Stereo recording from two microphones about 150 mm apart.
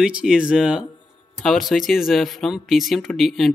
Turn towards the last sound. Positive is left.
turn(degrees=0)  # may be behind; listen again after turning